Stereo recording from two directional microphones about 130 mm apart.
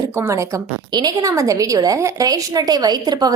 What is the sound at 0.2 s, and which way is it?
A woman's voice, 25° right (ahead or behind).